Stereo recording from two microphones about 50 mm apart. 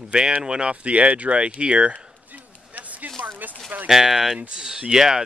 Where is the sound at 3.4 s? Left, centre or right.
Right.